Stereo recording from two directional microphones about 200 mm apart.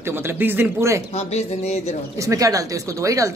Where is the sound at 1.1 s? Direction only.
30° left (ahead or behind).